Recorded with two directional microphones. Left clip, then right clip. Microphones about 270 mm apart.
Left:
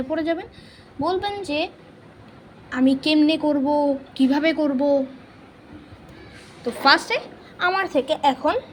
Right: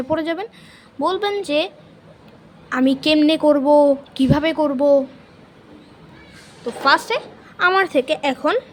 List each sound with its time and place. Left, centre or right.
0.1 s a woman's voice: right
6.8 s speech: centre
7.7 s a woman's voice: right